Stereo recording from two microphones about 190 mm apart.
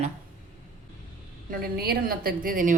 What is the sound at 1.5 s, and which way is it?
A woman's voice, 55° right (ahead or behind).